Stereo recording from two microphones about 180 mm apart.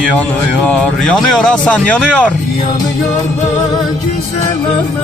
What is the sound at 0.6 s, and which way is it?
A man's voice, 5° left (ahead or behind).